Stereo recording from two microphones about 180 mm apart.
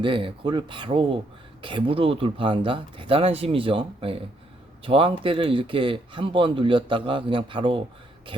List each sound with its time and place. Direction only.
0.0 s a man's voice: 30° right (ahead or behind)